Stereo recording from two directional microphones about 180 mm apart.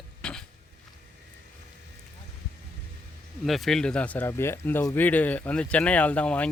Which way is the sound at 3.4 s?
Centre (ahead or behind).